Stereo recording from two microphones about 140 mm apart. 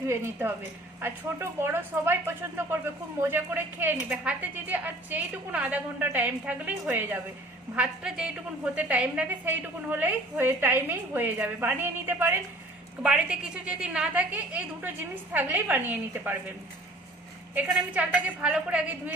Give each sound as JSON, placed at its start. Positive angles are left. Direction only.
{"t": 0.1, "sound": "a woman's voice", "side_deg": -15}
{"t": 17.5, "sound": "a woman's voice", "side_deg": -10}